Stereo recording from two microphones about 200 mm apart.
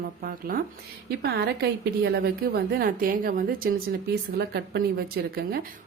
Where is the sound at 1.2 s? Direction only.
55° right (ahead or behind).